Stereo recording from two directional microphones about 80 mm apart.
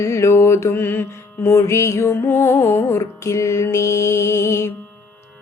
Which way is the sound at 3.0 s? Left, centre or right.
Left.